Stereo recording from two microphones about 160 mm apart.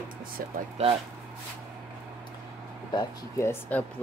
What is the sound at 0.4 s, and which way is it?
Speech, 65° right (ahead or behind).